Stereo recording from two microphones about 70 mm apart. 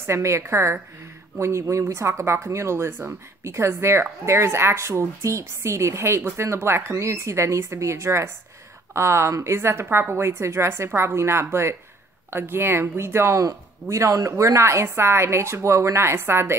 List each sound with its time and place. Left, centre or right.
0.0 s a woman's voice: right